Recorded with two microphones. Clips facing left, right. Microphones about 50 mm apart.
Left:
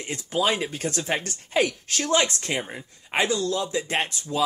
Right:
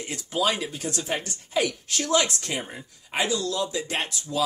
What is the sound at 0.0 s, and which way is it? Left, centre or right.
Speech, left.